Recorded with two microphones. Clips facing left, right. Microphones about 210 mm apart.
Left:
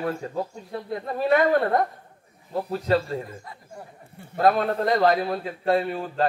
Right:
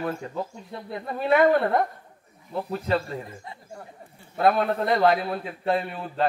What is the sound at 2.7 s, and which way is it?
Speech, 35° left (ahead or behind).